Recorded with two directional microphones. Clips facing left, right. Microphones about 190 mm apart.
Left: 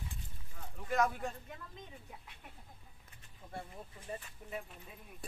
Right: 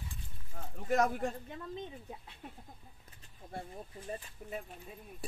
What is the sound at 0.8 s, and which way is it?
Speech, 50° right (ahead or behind).